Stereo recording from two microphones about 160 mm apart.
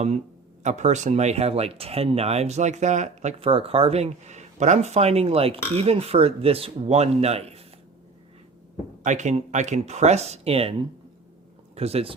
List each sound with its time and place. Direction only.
0.6 s speech: 50° right (ahead or behind)
9.0 s speech: 45° right (ahead or behind)
11.8 s speech: 40° right (ahead or behind)